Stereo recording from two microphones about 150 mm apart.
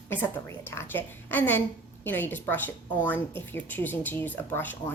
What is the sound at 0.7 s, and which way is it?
Speech, 15° left (ahead or behind).